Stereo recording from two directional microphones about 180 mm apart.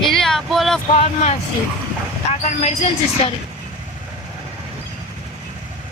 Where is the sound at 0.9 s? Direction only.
35° left (ahead or behind).